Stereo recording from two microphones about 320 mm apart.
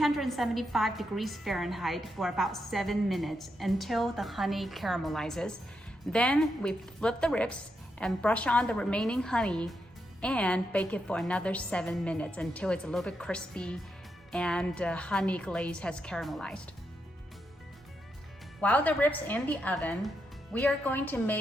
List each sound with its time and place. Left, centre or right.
0.0 s a woman's voice: centre
18.6 s a woman's voice: centre